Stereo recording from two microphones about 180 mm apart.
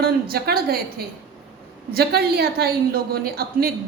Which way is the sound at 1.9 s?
60° right (ahead or behind).